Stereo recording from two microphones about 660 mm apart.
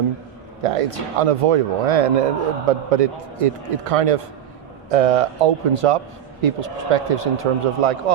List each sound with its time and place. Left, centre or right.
0.6 s speech: right